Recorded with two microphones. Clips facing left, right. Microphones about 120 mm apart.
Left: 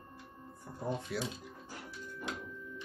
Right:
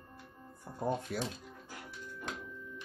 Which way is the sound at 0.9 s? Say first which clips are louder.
Right 2 dB; 45° right (ahead or behind).